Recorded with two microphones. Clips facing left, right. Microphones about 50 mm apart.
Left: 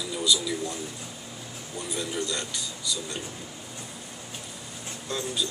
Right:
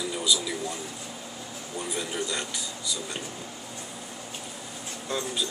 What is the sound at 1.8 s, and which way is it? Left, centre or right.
Speech, centre.